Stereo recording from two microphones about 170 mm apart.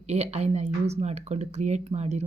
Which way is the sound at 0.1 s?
40° right (ahead or behind).